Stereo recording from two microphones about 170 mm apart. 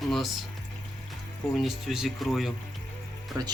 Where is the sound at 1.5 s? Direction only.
Centre (ahead or behind).